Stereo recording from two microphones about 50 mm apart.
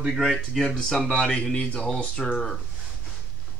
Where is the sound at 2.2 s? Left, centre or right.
Centre.